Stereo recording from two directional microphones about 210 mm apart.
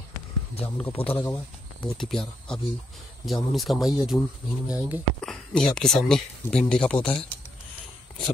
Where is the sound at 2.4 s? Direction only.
Centre (ahead or behind).